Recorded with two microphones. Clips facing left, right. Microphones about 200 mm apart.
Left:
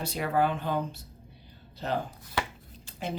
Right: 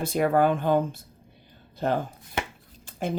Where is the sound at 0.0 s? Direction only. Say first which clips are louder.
Right 6 dB; 50° right (ahead or behind).